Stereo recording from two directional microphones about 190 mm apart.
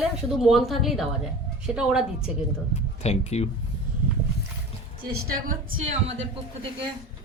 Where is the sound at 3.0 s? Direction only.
35° left (ahead or behind).